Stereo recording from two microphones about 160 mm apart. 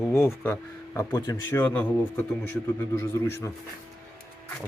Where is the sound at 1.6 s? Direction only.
10° left (ahead or behind).